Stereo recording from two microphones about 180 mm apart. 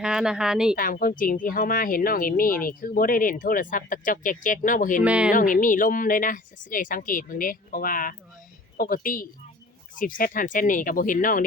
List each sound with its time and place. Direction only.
0.0 s speech: 5° right (ahead or behind)
0.8 s speech: 50° left (ahead or behind)
5.0 s speech: 5° right (ahead or behind)
5.3 s speech: 50° left (ahead or behind)